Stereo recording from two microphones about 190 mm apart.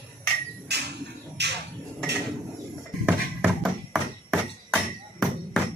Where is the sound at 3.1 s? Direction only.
5° right (ahead or behind).